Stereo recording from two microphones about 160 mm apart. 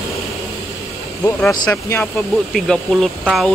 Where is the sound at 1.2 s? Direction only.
15° left (ahead or behind).